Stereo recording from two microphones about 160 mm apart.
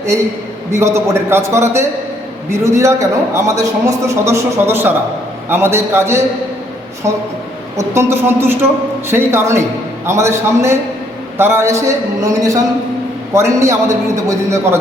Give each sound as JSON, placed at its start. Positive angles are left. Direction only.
{"t": 0.7, "sound": "a man's voice", "side_deg": -15}
{"t": 7.8, "sound": "a man's voice", "side_deg": -15}